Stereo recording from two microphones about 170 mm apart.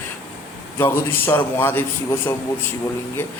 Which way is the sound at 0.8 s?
15° left (ahead or behind).